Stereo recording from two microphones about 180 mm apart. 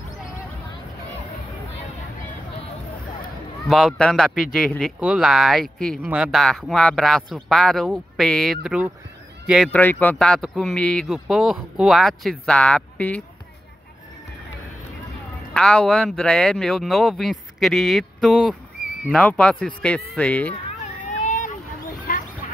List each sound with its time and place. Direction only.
3.6 s speech: centre (ahead or behind)
9.7 s speech: 10° left (ahead or behind)
15.5 s speech: 5° left (ahead or behind)
20.8 s a sound: 40° left (ahead or behind)